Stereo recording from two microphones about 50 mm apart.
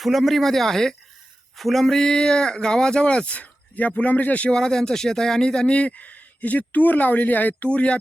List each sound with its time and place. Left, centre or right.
0.0 s speech: centre; by 4.4 s left
4.4 s speech: centre
5.7 s speech: left
7.7 s speech: left